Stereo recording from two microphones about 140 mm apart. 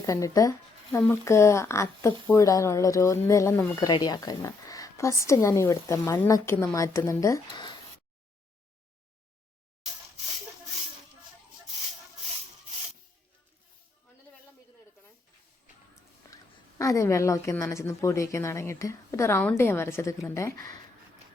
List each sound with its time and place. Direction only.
0.0 s speech: 25° left (ahead or behind)
16.3 s speech: 25° left (ahead or behind)